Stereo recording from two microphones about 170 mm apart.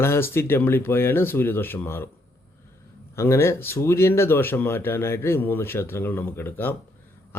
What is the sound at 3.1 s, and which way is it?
A man's voice, 15° left (ahead or behind).